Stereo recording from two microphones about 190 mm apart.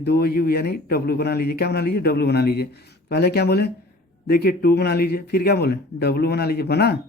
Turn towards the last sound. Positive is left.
turn(degrees=60)  # may be behind; listen again after turning